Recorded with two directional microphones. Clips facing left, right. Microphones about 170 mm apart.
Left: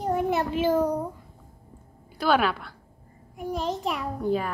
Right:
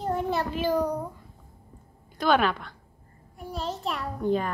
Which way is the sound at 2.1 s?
5° left (ahead or behind).